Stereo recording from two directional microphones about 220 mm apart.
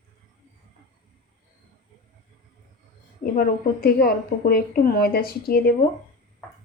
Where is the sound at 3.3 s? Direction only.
45° left (ahead or behind).